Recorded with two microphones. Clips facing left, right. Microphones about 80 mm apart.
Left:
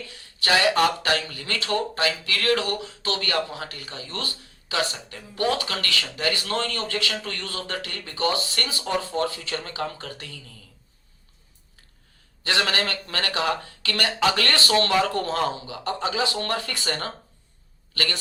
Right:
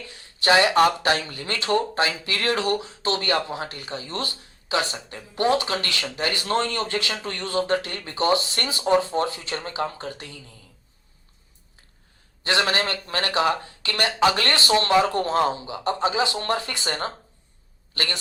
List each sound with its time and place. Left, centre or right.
0.0 s speech: right
12.4 s a man's voice: right